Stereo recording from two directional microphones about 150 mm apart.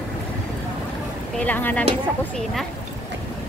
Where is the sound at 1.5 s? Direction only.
10° left (ahead or behind).